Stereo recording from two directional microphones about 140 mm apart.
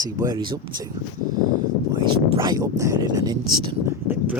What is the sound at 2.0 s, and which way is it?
Speech, 30° right (ahead or behind).